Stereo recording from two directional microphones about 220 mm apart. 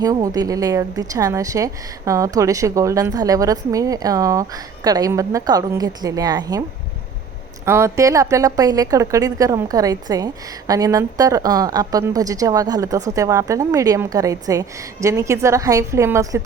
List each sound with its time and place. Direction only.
0.0 s a woman's voice: 15° right (ahead or behind)
7.6 s a woman's voice: 10° right (ahead or behind)